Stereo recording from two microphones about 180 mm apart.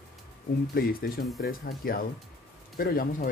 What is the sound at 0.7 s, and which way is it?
Speech, 55° left (ahead or behind).